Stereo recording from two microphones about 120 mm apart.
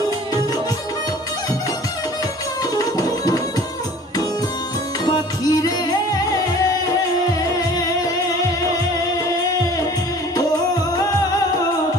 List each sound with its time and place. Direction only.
5.0 s music: 35° left (ahead or behind)